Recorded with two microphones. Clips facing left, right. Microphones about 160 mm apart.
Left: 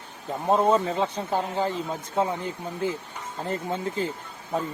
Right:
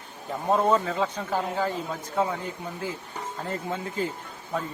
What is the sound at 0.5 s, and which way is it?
Speech, 25° left (ahead or behind).